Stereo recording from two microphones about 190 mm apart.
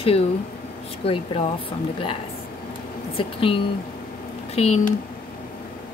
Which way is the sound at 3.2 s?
25° left (ahead or behind).